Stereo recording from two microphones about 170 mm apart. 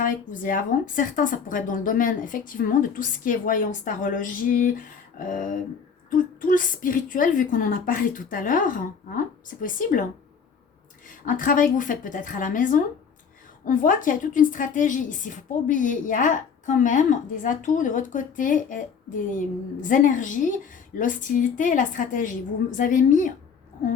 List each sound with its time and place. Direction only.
0.0 s speech: 50° left (ahead or behind)
11.3 s speech: 50° left (ahead or behind)
19.9 s speech: 50° left (ahead or behind)